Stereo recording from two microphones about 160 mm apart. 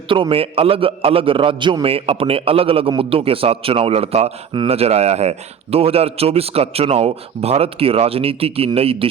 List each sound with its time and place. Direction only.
0.1 s a man's voice: 35° right (ahead or behind)